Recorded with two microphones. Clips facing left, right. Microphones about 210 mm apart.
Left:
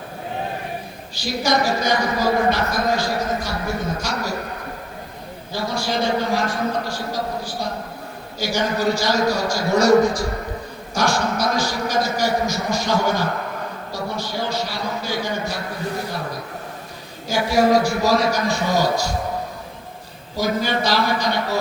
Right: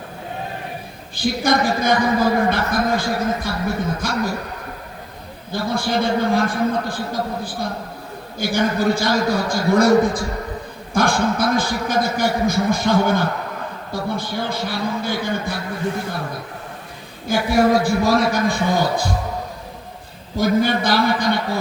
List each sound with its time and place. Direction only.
1.1 s a man's voice: 55° right (ahead or behind)
5.5 s a man's voice: 55° right (ahead or behind)
17.2 s speech: 55° right (ahead or behind)
20.3 s speech: 55° right (ahead or behind)